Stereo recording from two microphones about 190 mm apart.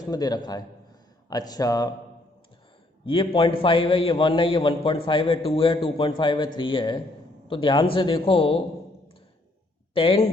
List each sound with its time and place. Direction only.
0.0 s a man's voice: 20° left (ahead or behind)
3.1 s a man's voice: 30° left (ahead or behind)
9.9 s a man's voice: 30° left (ahead or behind)